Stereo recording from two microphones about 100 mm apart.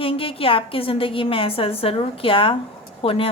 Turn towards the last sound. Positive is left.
turn(degrees=70)  # may be behind; listen again after turning